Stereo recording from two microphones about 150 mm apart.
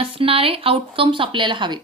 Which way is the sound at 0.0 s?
35° right (ahead or behind).